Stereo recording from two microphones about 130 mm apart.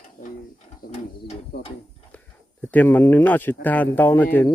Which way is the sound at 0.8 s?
55° left (ahead or behind).